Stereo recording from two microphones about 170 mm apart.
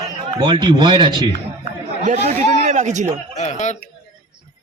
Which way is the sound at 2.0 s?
45° right (ahead or behind).